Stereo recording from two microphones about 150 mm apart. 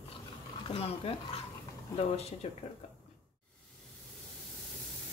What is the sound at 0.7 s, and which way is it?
Speech, 40° left (ahead or behind).